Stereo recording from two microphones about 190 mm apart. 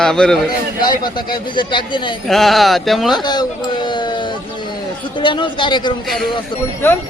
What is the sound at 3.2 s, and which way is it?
A man's voice, 20° left (ahead or behind).